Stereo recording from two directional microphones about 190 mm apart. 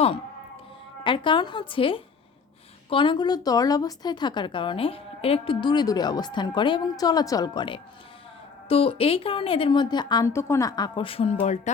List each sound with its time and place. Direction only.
1.0 s a woman's voice: 25° left (ahead or behind)